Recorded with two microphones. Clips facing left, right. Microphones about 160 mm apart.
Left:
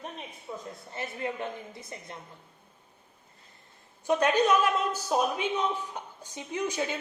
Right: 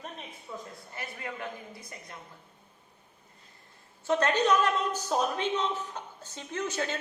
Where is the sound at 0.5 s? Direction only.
25° left (ahead or behind).